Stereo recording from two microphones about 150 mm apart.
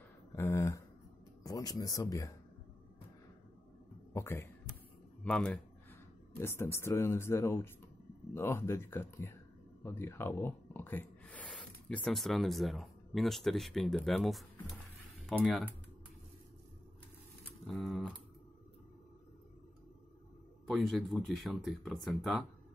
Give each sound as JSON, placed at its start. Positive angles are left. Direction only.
{"t": 0.4, "sound": "a sound", "side_deg": 20}
{"t": 1.4, "sound": "speech", "side_deg": 25}
{"t": 4.1, "sound": "a man's voice", "side_deg": 15}
{"t": 17.6, "sound": "speech", "side_deg": 0}
{"t": 20.6, "sound": "speech", "side_deg": 0}